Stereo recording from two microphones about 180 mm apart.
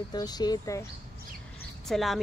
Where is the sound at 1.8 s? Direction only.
Centre (ahead or behind).